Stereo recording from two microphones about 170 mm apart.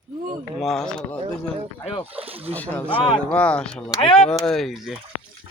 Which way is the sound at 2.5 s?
10° left (ahead or behind).